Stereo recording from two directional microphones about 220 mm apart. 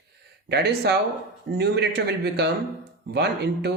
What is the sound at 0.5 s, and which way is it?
Speech, 45° right (ahead or behind).